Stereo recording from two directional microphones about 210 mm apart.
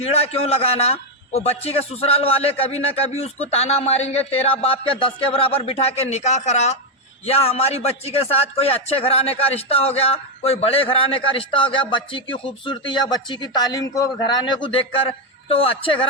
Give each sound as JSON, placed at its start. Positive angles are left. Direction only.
{"t": 0.0, "sound": "a man's voice", "side_deg": 30}